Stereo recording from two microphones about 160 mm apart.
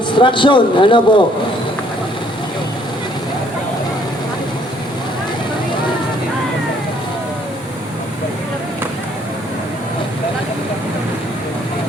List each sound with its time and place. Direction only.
0.2 s a man's voice: 30° left (ahead or behind)